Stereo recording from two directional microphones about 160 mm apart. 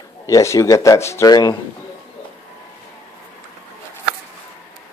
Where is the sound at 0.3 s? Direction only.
20° left (ahead or behind).